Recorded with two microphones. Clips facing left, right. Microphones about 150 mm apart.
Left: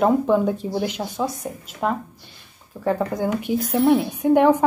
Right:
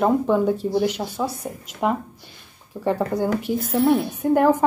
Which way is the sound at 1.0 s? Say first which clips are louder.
Left 1 dB; 10° right (ahead or behind).